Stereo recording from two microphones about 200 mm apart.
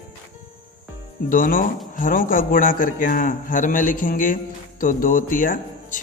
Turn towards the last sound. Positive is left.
turn(degrees=40)  # may be behind; listen again after turning